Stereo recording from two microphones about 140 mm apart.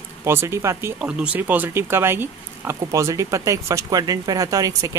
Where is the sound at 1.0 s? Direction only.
5° right (ahead or behind).